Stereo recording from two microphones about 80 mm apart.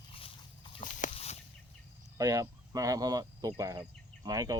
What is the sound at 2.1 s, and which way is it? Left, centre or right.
Speech, right.